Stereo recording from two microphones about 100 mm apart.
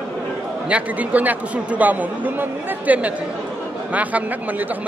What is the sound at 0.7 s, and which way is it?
Speech, 15° right (ahead or behind).